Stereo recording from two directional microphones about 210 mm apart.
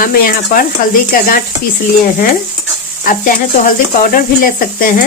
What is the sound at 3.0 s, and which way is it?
Speech, 40° left (ahead or behind).